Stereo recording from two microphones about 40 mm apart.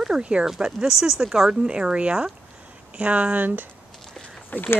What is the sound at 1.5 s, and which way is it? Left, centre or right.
Speech, right.